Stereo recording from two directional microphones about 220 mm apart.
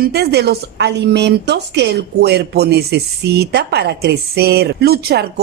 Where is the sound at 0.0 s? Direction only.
45° right (ahead or behind).